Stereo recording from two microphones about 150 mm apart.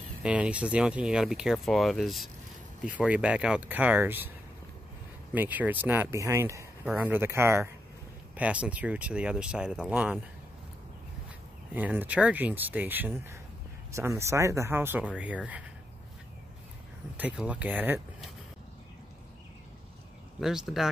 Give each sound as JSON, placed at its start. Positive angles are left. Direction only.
{"t": 0.2, "sound": "speech", "side_deg": -10}
{"t": 5.3, "sound": "speech", "side_deg": -10}
{"t": 11.7, "sound": "speech", "side_deg": -10}
{"t": 17.2, "sound": "speech", "side_deg": -10}
{"t": 20.3, "sound": "speech", "side_deg": 0}